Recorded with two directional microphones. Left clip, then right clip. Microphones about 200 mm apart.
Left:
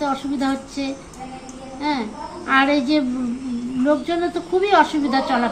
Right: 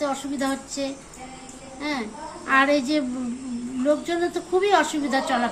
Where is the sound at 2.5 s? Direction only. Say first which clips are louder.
Left 2 dB; 25° right (ahead or behind).